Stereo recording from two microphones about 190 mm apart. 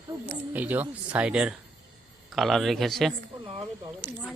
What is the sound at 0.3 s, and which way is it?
Speech, 10° right (ahead or behind).